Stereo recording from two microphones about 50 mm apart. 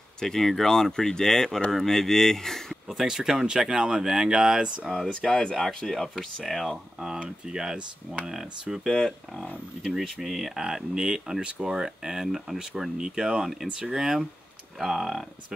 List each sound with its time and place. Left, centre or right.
0.2 s speech: centre
2.9 s speech: centre
4.9 s speech: centre
6.4 s speech: centre
7.2 s speech: centre
8.9 s speech: centre
9.8 s speech: centre